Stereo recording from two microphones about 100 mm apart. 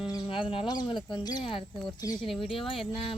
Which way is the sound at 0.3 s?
60° left (ahead or behind).